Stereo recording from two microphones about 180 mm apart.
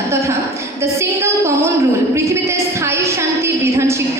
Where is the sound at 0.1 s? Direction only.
15° right (ahead or behind).